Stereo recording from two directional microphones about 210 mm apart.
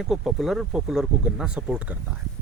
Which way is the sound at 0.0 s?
Centre (ahead or behind).